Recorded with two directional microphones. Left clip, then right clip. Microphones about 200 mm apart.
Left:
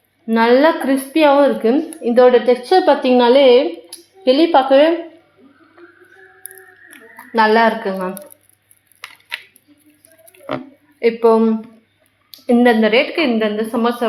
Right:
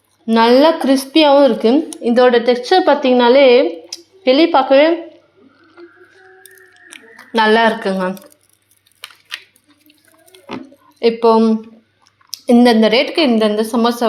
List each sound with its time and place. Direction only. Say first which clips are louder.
0.3 s speech: right 2 dB; 40° right (ahead or behind); by 4.9 s 25° right (ahead or behind)
7.3 s a woman's voice: right 1 dB; 40° right (ahead or behind)
10.3 s squish: left 2 dB; 35° right (ahead or behind)
11.0 s a woman's voice: right 1 dB; 35° right (ahead or behind)